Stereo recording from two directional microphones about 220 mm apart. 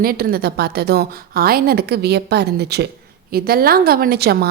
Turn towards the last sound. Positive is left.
turn(degrees=-45)  # may be behind; listen again after turning